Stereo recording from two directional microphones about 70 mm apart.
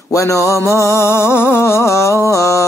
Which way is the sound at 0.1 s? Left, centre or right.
Left.